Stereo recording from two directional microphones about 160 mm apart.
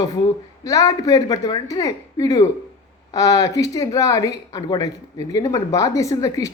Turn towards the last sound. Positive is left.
turn(degrees=20)  # may be behind; listen again after turning